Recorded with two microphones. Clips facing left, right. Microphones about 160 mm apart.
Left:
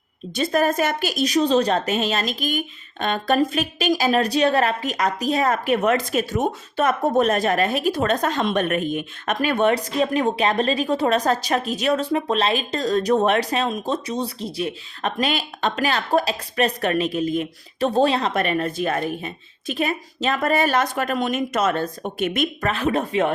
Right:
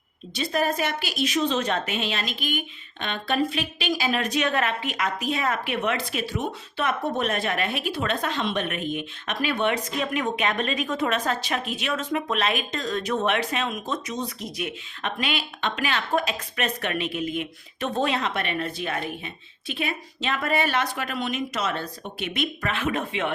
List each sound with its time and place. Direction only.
0.3 s a woman's voice: 45° left (ahead or behind)